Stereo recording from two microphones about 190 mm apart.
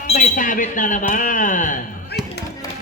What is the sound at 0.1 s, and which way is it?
A man's voice, 40° left (ahead or behind).